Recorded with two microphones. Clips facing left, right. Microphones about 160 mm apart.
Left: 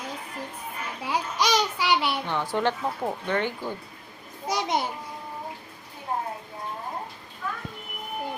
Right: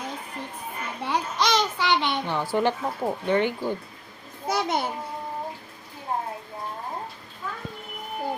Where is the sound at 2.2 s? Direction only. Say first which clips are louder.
Right 4 dB; 10° right (ahead or behind).